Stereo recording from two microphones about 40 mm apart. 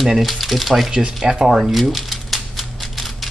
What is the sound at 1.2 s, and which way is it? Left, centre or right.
Speech, centre.